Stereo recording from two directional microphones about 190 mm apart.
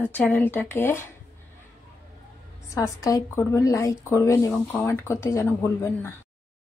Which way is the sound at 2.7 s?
15° left (ahead or behind).